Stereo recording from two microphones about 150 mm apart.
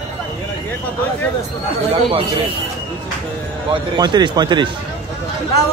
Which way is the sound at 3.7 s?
30° right (ahead or behind).